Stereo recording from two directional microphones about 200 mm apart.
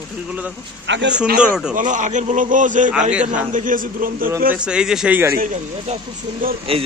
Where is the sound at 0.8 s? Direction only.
65° right (ahead or behind).